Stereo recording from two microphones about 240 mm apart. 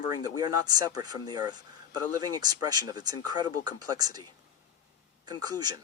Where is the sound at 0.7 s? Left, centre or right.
Centre.